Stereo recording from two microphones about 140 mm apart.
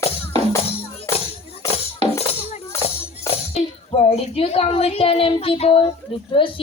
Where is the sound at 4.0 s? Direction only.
45° left (ahead or behind).